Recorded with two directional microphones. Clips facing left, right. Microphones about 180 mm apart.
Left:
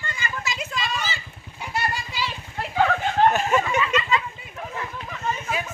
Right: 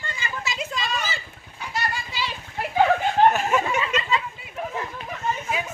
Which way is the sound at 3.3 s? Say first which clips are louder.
Left 1 dB; 5° right (ahead or behind).